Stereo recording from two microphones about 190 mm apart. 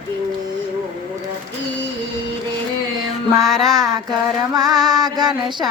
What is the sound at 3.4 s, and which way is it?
Music, centre (ahead or behind).